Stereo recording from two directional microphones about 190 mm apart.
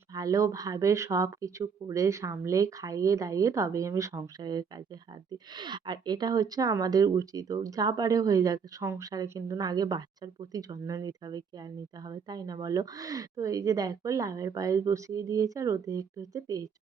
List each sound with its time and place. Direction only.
0.1 s a woman's voice: 20° right (ahead or behind)